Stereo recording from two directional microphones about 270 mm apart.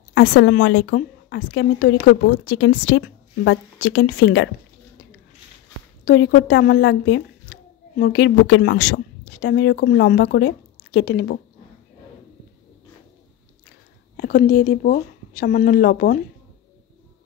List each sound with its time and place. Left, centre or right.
0.1 s a woman's voice: left
6.0 s a woman's voice: left
14.1 s a woman's voice: left